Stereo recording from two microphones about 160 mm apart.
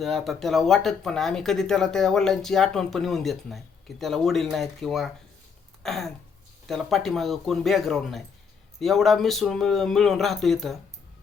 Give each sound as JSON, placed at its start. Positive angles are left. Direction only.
{"t": 0.0, "sound": "speech", "side_deg": 0}
{"t": 5.8, "sound": "a sound", "side_deg": 0}
{"t": 6.7, "sound": "speech", "side_deg": 0}